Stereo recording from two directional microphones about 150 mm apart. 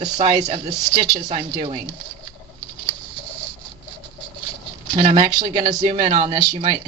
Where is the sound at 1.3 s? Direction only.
40° right (ahead or behind).